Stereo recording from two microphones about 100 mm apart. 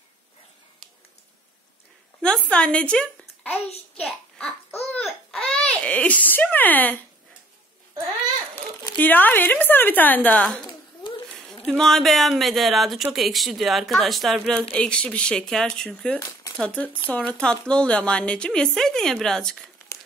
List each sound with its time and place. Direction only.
2.5 s a woman's voice: 10° left (ahead or behind)
5.0 s babbling: 5° left (ahead or behind)
8.9 s a woman's voice: 20° left (ahead or behind); by 14.6 s centre (ahead or behind)
14.7 s a woman's voice: 10° left (ahead or behind)
16.2 s a sound: 35° left (ahead or behind)
16.5 s a woman's voice: 15° left (ahead or behind)
19.9 s crumpling: 30° left (ahead or behind)